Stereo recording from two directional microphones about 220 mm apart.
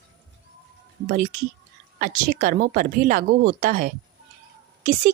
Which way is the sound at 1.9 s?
40° right (ahead or behind).